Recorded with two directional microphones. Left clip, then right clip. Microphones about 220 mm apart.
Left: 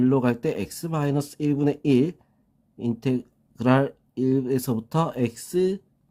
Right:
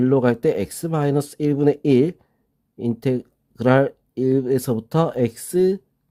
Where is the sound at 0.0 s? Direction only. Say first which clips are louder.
Right 5 dB; 25° right (ahead or behind).